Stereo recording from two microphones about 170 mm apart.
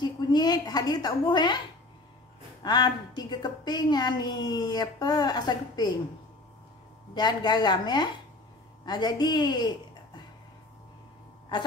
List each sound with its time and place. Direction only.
0.0 s a woman's voice: 25° left (ahead or behind)
2.6 s a woman's voice: 25° left (ahead or behind)
7.2 s a woman's voice: 25° left (ahead or behind)